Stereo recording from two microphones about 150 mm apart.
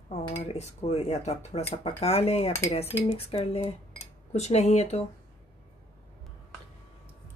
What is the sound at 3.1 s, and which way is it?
Speech, 40° left (ahead or behind).